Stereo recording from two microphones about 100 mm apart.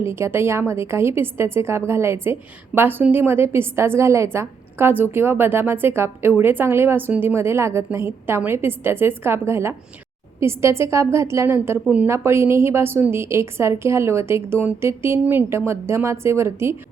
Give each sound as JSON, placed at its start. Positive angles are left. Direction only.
{"t": 0.0, "sound": "a woman's voice", "side_deg": -25}